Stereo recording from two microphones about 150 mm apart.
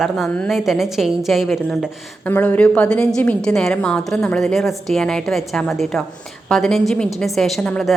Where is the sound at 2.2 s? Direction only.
15° left (ahead or behind).